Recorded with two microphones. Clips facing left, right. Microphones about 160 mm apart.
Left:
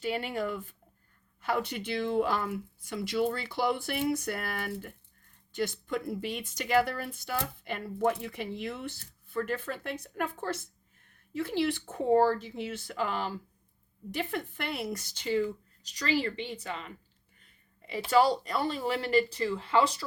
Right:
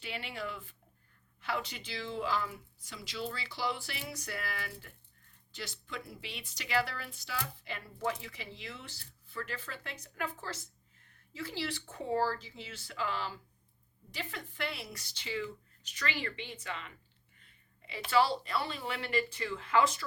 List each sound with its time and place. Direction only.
0.0 s speech: 45° left (ahead or behind)